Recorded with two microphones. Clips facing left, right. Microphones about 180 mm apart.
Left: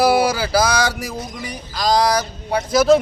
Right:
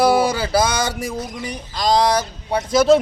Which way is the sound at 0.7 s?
25° right (ahead or behind).